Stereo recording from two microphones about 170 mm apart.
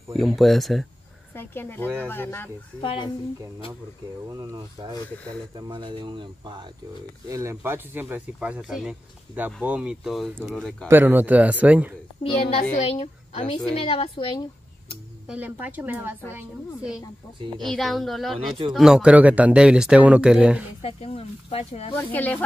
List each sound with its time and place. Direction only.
0.1 s speech: centre (ahead or behind)
1.3 s speech: 15° left (ahead or behind)
2.8 s speech: 30° left (ahead or behind)
4.3 s speech: 25° right (ahead or behind)
7.2 s speech: 15° right (ahead or behind); by 10.9 s centre (ahead or behind)
10.9 s speech: 10° right (ahead or behind)
12.2 s speech: 35° left (ahead or behind)
15.2 s speech: 10° right (ahead or behind)
20.8 s speech: 35° left (ahead or behind)
21.9 s speech: 10° left (ahead or behind)